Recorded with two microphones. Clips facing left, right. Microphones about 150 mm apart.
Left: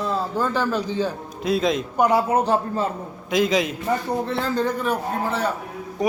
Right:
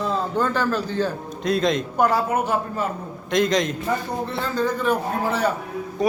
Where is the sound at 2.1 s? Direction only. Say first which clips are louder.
Left 3 dB; 30° left (ahead or behind).